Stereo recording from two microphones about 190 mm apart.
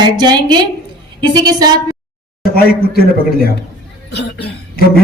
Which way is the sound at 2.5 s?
55° left (ahead or behind).